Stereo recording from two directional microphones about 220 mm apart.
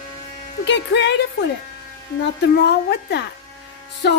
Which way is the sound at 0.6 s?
50° left (ahead or behind).